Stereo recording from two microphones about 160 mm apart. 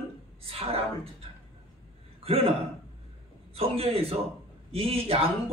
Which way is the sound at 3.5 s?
40° right (ahead or behind).